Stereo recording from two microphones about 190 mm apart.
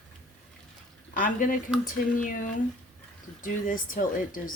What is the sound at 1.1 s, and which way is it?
Speech, 45° left (ahead or behind).